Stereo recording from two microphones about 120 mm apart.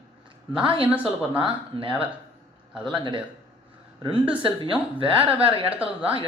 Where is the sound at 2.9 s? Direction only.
40° right (ahead or behind).